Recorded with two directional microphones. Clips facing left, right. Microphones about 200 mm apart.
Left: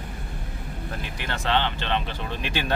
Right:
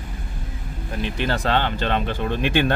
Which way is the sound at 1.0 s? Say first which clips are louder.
Right 9 dB; 30° right (ahead or behind).